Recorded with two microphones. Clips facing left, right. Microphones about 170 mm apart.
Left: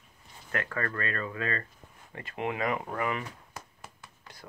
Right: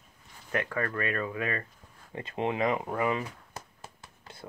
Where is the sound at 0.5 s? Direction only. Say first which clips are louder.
Right 2 dB; 15° right (ahead or behind).